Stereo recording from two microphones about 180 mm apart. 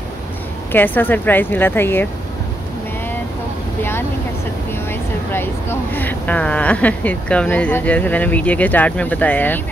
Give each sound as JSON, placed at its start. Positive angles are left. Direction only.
{"t": 0.7, "sound": "speech", "side_deg": 10}
{"t": 5.3, "sound": "speech", "side_deg": 10}